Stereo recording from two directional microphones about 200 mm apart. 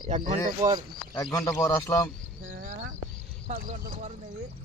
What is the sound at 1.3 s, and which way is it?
Speech, 15° left (ahead or behind).